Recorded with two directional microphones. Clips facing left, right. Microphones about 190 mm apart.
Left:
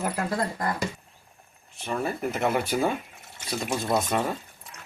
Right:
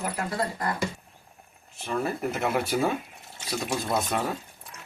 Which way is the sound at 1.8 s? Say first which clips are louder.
Even; centre (ahead or behind).